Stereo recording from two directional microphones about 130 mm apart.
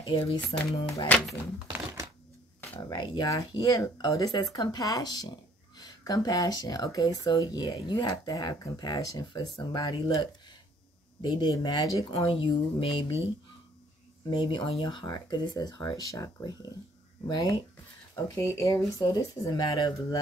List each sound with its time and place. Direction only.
0.3 s speech: 45° left (ahead or behind)
1.1 s speech: 10° left (ahead or behind)
2.9 s speech: 30° left (ahead or behind)
12.2 s speech: 45° left (ahead or behind)
14.3 s speech: 35° left (ahead or behind)